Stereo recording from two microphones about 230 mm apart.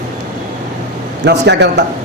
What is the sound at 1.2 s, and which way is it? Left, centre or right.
Speech, right.